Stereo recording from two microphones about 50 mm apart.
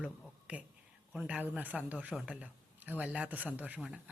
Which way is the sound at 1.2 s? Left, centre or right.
Right.